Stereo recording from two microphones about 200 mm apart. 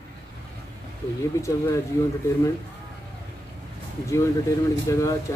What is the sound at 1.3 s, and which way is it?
Speech, 15° left (ahead or behind).